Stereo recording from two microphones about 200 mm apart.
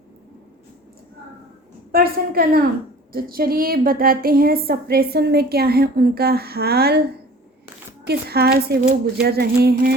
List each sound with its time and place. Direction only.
1.9 s a woman's voice: 50° right (ahead or behind)
8.0 s a woman's voice: 50° right (ahead or behind)